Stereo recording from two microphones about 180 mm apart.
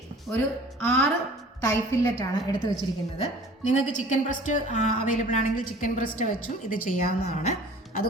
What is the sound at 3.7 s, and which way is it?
A woman's voice, 40° left (ahead or behind).